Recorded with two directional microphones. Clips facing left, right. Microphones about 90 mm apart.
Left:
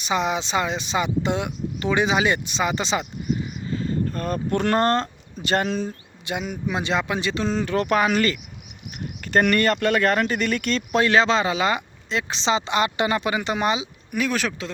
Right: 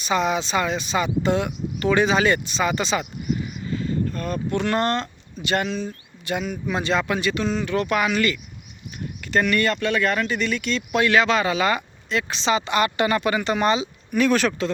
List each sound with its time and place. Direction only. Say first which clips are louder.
0.0 s speech: right 1 dB; 20° left (ahead or behind); by 5.9 s 45° left (ahead or behind)
6.2 s speech: right 1 dB; 20° left (ahead or behind); by 14.7 s centre (ahead or behind)